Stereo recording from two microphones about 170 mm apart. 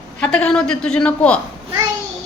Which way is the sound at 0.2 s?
5° left (ahead or behind).